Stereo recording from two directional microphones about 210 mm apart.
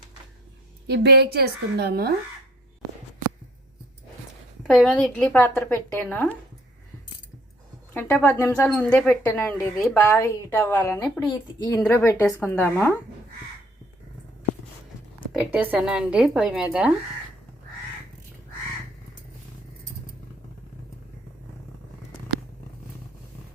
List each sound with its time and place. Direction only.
0.9 s a woman's voice: 50° right (ahead or behind)
4.6 s speech: centre (ahead or behind)
7.9 s speech: 10° left (ahead or behind)
15.5 s a woman's voice: 10° right (ahead or behind)